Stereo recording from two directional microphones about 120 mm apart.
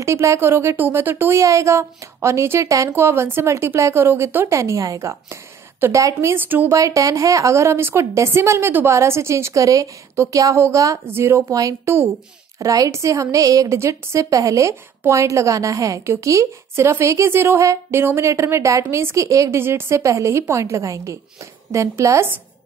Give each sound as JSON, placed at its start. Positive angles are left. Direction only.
{"t": 0.0, "sound": "a woman's voice", "side_deg": -25}
{"t": 6.8, "sound": "a woman's voice", "side_deg": -25}